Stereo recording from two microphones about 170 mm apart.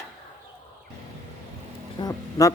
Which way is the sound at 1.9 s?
20° left (ahead or behind).